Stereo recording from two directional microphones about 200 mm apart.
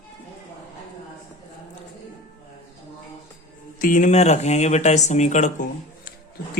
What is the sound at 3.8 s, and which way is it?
Speech, 40° left (ahead or behind).